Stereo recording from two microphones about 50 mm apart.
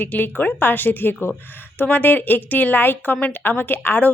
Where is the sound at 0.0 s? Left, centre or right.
Left.